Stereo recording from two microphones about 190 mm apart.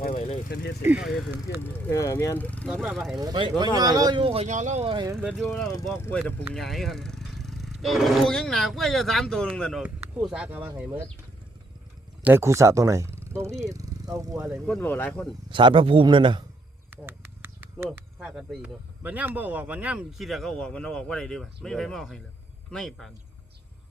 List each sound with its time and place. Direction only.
0.0 s vehicle: 45° left (ahead or behind)
0.5 s speech: 60° left (ahead or behind)
0.8 s speech: 5° right (ahead or behind)
1.6 s speech: 15° left (ahead or behind); by 3.2 s centre (ahead or behind)
3.2 s speech: 25° right (ahead or behind)
5.1 s speech: centre (ahead or behind)
12.2 s speech: 15° right (ahead or behind)
14.8 s speech: 10° left (ahead or behind)
15.4 s speech: 25° right (ahead or behind)
16.9 s a sound: 10° right (ahead or behind)
17.9 s speech: 5° right (ahead or behind)